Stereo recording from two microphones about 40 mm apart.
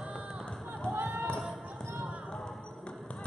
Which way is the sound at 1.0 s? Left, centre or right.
Right.